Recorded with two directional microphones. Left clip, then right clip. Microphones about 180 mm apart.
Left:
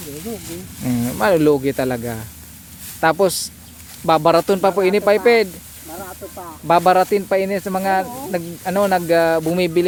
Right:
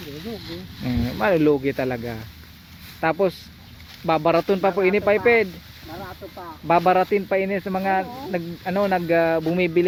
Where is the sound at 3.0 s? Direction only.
25° left (ahead or behind).